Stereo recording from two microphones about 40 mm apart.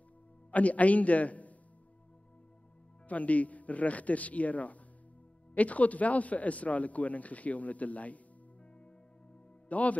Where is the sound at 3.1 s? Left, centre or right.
Left.